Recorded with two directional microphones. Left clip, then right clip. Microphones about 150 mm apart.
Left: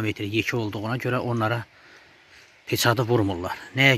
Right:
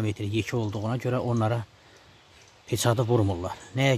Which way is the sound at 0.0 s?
5° right (ahead or behind).